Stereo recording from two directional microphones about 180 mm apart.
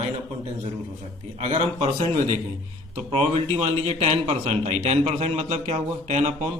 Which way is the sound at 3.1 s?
35° right (ahead or behind).